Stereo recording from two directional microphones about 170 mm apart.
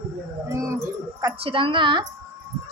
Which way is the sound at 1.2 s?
30° right (ahead or behind).